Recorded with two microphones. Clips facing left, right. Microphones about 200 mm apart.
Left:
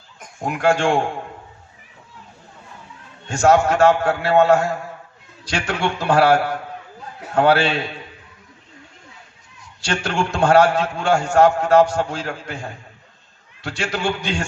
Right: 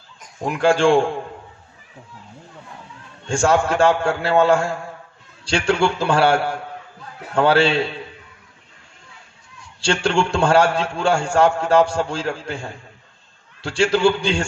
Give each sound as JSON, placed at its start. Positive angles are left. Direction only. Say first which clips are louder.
{"t": 0.4, "sound": "a man's voice", "louder": "right 2 dB", "side_deg": -30}
{"t": 3.2, "sound": "a man's voice", "louder": "left 2 dB", "side_deg": -30}
{"t": 9.6, "sound": "a man's voice", "louder": "right 3 dB", "side_deg": -30}